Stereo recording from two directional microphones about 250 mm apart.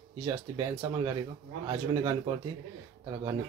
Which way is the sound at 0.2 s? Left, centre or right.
Centre.